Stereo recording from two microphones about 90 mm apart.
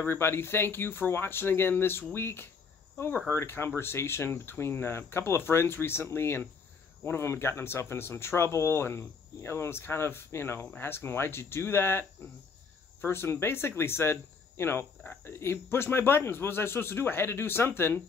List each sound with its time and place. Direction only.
0.0 s speech: 25° left (ahead or behind)